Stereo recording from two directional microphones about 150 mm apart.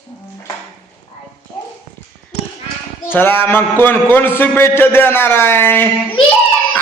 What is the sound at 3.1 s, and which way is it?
A man's voice, 15° left (ahead or behind).